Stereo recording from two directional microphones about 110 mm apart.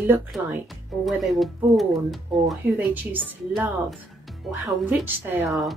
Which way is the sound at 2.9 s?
15° right (ahead or behind).